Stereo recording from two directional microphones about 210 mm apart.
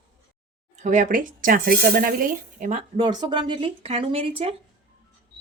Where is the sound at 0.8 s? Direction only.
35° right (ahead or behind).